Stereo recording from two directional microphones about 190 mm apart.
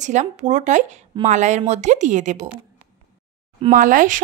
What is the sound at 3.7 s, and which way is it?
Speech, 45° right (ahead or behind).